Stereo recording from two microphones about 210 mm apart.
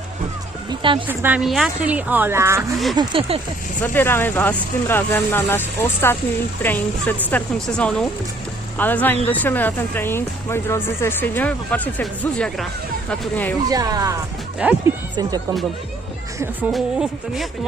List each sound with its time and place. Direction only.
0.7 s speech: 25° right (ahead or behind)
1.0 s speech: 10° right (ahead or behind); by 3.4 s 25° right (ahead or behind)
3.8 s speech: 10° left (ahead or behind)
13.7 s speech: 15° right (ahead or behind)
14.6 s speech: 5° right (ahead or behind)
15.1 s speech: 20° right (ahead or behind)
16.4 s speech: 10° right (ahead or behind)